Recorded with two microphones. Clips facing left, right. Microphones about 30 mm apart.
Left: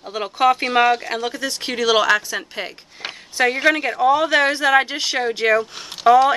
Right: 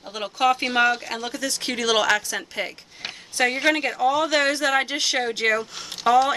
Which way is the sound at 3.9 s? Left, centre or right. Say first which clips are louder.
Left 5 dB; centre.